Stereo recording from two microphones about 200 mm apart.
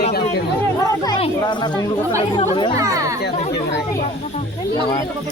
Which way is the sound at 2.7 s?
15° right (ahead or behind).